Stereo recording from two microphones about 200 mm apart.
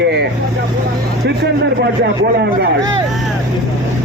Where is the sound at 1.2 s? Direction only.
55° right (ahead or behind).